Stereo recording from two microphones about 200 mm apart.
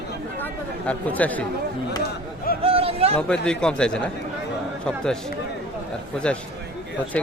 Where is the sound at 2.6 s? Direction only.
30° right (ahead or behind).